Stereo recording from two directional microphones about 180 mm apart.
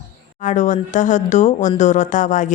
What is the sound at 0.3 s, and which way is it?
A woman's voice, 45° left (ahead or behind).